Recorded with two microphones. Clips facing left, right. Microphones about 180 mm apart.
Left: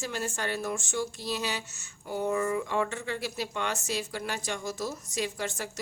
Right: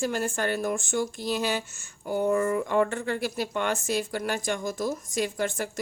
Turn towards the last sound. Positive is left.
turn(degrees=-50)  # may be behind; listen again after turning